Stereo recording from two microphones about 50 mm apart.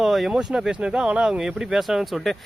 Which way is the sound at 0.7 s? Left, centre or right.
Right.